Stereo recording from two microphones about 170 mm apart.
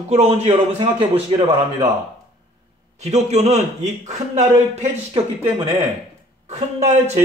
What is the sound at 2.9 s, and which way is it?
A man's voice, 40° right (ahead or behind).